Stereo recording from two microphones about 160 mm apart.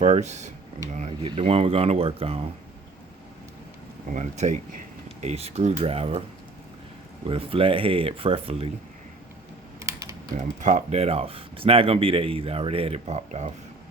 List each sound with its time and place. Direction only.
0.0 s speech: 45° right (ahead or behind)
4.1 s speech: 45° right (ahead or behind)
7.3 s speech: 35° right (ahead or behind)
9.8 s typing: 20° right (ahead or behind)
10.3 s speech: 50° right (ahead or behind)